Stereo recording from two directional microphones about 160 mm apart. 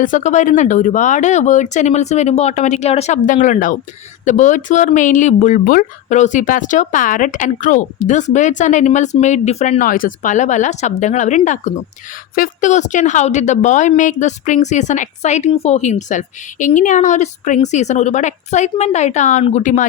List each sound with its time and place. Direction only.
0.0 s a woman's voice: 50° left (ahead or behind)